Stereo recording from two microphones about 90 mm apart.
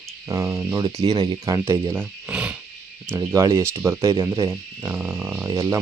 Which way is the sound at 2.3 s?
10° right (ahead or behind).